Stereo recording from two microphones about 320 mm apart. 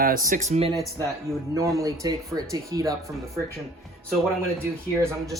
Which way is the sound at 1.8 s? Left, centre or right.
Centre.